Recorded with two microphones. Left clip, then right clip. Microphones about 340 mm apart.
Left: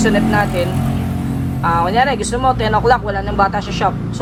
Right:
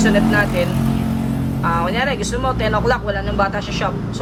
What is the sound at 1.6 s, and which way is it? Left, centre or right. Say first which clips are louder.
Speech: left 5 dB; left.